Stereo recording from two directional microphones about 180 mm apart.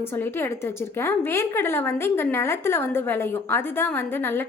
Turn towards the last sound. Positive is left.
turn(degrees=10)  # may be behind; listen again after turning